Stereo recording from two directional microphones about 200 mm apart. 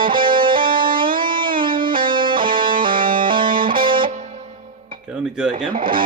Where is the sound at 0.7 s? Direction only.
45° right (ahead or behind).